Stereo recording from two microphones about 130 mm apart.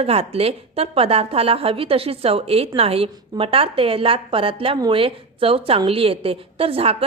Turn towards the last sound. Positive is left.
turn(degrees=-45)  # may be behind; listen again after turning